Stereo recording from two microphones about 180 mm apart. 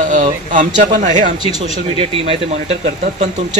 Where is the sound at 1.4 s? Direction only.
35° left (ahead or behind).